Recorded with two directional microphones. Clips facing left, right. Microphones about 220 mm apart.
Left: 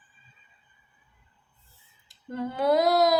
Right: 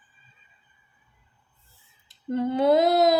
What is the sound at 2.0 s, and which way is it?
Female singing, 25° right (ahead or behind).